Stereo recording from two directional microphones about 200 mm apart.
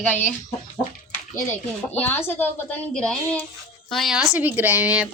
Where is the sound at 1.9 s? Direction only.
10° left (ahead or behind).